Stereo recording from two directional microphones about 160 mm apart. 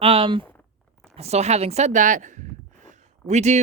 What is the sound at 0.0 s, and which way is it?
Speech, 35° right (ahead or behind).